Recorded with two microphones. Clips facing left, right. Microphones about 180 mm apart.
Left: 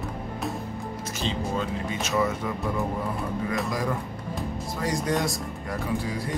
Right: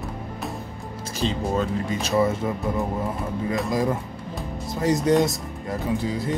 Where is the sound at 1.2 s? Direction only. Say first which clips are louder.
Right 5 dB; 40° right (ahead or behind).